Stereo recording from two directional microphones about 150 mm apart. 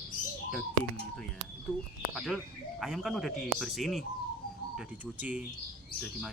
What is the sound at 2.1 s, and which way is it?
Speech, centre (ahead or behind).